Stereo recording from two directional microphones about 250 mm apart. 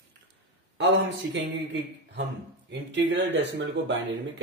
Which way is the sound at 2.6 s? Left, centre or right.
Right.